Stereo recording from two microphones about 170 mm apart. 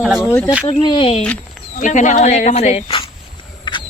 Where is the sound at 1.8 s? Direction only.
45° left (ahead or behind).